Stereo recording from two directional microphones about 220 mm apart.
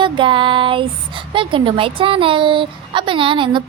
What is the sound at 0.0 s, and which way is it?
Speech, 20° right (ahead or behind).